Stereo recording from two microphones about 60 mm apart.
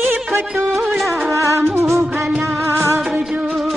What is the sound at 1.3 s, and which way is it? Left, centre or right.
Music, right.